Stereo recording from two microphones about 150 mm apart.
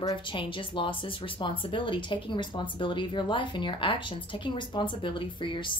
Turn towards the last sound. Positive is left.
turn(degrees=35)  # may be behind; listen again after turning